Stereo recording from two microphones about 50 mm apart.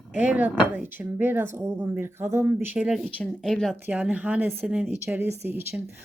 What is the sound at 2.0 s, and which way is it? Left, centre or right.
Speech, right.